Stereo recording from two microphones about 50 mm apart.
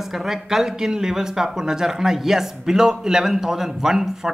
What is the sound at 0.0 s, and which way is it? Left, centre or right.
Speech, centre.